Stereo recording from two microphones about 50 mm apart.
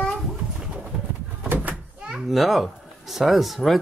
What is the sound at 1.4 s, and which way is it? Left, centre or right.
Door, right.